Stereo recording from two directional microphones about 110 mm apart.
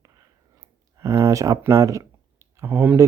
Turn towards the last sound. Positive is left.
turn(degrees=-20)  # may be behind; listen again after turning